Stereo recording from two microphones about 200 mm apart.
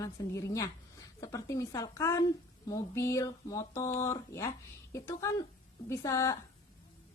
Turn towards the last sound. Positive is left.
turn(degrees=15)  # may be behind; listen again after turning